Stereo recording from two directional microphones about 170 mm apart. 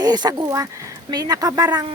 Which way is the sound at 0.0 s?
25° right (ahead or behind).